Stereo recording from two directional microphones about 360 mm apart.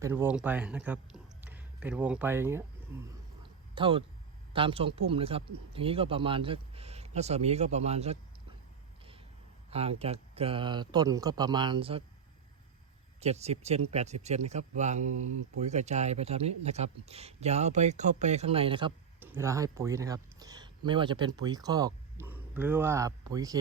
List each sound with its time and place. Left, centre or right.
0.0 s speech: centre
3.4 s a sound: centre
4.5 s speech: centre
9.6 s speech: centre
13.1 s speech: centre